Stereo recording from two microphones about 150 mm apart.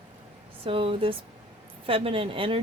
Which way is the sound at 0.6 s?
35° right (ahead or behind).